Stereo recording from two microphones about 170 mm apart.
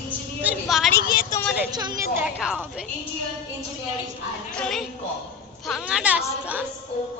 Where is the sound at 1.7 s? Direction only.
25° right (ahead or behind).